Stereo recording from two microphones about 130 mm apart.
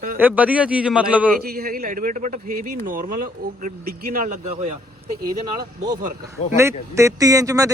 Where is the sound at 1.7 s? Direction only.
90° right.